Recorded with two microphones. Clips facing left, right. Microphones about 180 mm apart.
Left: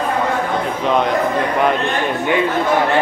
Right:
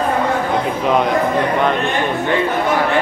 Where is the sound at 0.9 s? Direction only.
5° right (ahead or behind).